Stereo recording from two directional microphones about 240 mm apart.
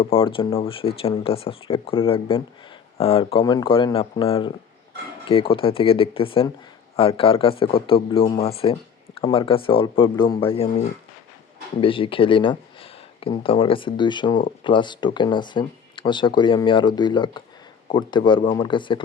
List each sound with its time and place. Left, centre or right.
0.0 s speech: left